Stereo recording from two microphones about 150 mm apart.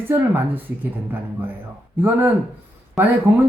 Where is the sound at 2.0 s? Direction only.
15° right (ahead or behind).